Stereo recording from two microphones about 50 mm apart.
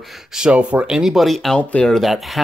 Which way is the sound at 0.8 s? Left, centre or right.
Centre.